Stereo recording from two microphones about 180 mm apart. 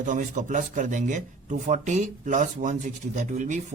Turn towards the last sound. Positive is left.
turn(degrees=-45)  # may be behind; listen again after turning